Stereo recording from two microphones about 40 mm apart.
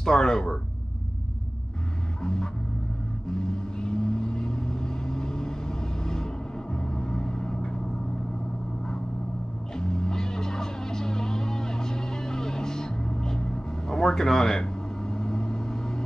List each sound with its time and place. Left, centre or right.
0.0 s speech: centre
2.2 s vehicle: centre
9.8 s music: centre